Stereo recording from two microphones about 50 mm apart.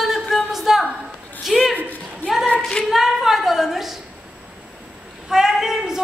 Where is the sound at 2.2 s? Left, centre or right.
Centre.